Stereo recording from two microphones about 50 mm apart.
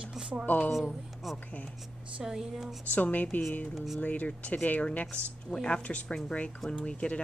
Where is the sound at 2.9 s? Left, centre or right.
Left.